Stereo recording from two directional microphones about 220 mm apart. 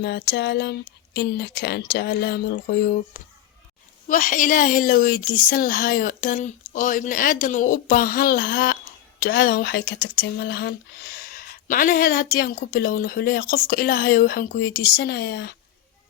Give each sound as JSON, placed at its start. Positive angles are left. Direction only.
{"t": 0.0, "sound": "speech", "side_deg": 50}
{"t": 4.1, "sound": "a woman's voice", "side_deg": 35}